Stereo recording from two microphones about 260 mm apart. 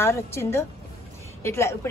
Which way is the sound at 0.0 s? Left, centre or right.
Centre.